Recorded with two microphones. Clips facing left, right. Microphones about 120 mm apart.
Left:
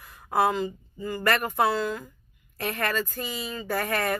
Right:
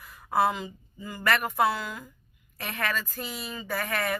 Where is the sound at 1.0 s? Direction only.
5° right (ahead or behind).